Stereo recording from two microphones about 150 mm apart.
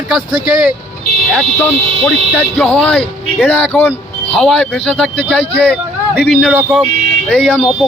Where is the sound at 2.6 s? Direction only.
5° left (ahead or behind).